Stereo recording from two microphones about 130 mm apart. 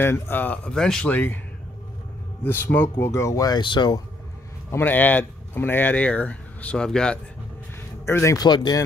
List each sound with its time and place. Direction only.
0.0 s speech: 15° left (ahead or behind)
2.4 s speech: 15° left (ahead or behind); by 4.0 s 35° left (ahead or behind)
4.6 s speech: 15° left (ahead or behind)
8.0 s speech: 20° left (ahead or behind)